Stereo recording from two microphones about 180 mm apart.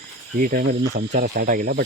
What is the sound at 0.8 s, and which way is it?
Speech, 80° right.